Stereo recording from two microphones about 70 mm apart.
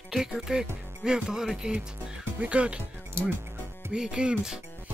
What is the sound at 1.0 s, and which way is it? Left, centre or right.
Speech, centre.